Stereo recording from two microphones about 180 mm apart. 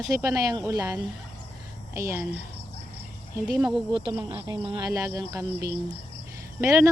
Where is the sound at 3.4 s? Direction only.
20° right (ahead or behind).